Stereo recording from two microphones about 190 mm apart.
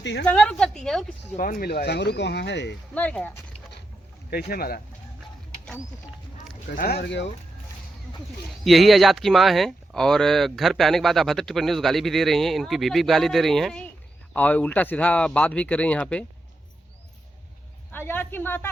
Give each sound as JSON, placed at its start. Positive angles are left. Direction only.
{"t": 0.0, "sound": "a woman's voice", "side_deg": 65}
{"t": 0.3, "sound": "speech", "side_deg": 5}
{"t": 1.4, "sound": "speech", "side_deg": 50}
{"t": 2.9, "sound": "speech", "side_deg": 5}
{"t": 4.3, "sound": "speech", "side_deg": 55}
{"t": 6.7, "sound": "speech", "side_deg": 55}
{"t": 8.6, "sound": "speech", "side_deg": 0}
{"t": 17.9, "sound": "speech", "side_deg": 10}